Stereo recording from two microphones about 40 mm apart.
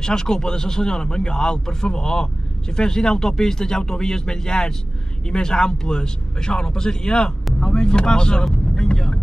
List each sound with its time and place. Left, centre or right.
0.0 s speech: centre